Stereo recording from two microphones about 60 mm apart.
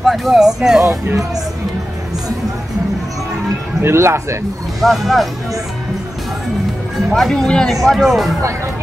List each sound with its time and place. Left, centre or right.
0.0 s speech: centre
0.8 s speech: right
3.8 s speech: right
4.7 s speech: centre
7.2 s speech: centre
7.8 s speech: centre